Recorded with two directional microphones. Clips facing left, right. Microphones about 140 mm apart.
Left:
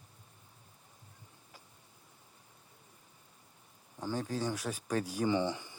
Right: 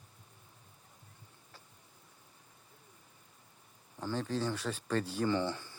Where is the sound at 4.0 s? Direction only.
10° left (ahead or behind).